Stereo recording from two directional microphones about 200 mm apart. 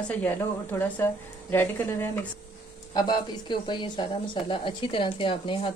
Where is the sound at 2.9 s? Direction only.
20° left (ahead or behind).